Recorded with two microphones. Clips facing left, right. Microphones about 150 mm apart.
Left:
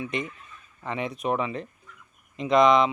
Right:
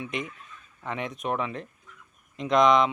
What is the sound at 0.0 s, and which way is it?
Speech, centre (ahead or behind).